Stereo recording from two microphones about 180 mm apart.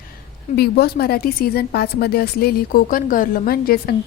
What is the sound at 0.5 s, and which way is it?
Speech, 60° left (ahead or behind).